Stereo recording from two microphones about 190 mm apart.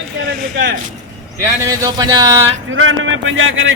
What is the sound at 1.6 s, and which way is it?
Speech, 20° right (ahead or behind).